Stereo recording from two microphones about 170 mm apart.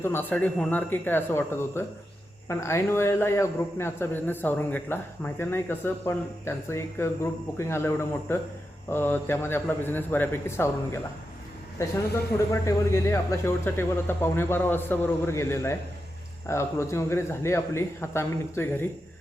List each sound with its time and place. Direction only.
0.0 s a man's voice: 10° left (ahead or behind)
12.6 s a man's voice: 15° left (ahead or behind)